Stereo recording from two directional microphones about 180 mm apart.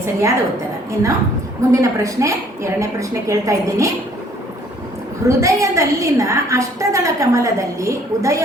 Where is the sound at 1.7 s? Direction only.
15° right (ahead or behind).